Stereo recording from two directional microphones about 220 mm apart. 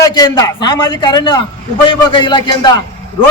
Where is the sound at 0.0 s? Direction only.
20° left (ahead or behind).